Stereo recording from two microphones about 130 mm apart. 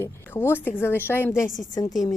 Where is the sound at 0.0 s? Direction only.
15° left (ahead or behind).